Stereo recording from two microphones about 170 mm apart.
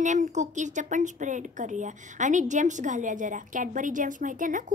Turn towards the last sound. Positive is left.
turn(degrees=-50)  # may be behind; listen again after turning